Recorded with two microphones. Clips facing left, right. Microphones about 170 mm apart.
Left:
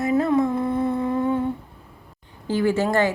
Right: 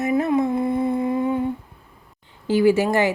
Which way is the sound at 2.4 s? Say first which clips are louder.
Right 4 dB; 15° right (ahead or behind).